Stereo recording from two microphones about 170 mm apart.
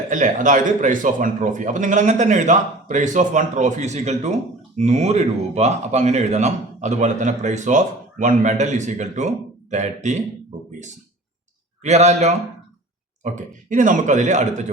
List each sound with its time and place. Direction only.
0.1 s speech: 50° right (ahead or behind)
11.8 s a man's voice: 40° right (ahead or behind)